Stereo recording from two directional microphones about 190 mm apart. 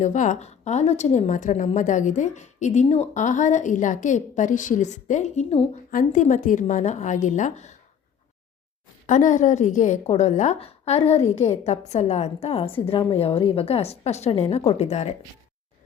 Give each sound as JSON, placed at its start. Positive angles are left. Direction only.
{"t": 0.0, "sound": "speech", "side_deg": 40}
{"t": 9.0, "sound": "speech", "side_deg": 40}